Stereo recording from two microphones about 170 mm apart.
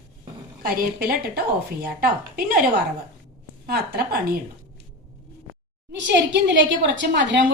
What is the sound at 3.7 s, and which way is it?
Speech, 65° right (ahead or behind).